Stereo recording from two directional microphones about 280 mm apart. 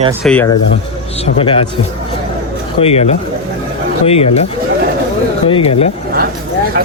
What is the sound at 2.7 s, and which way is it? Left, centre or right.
Speech, left.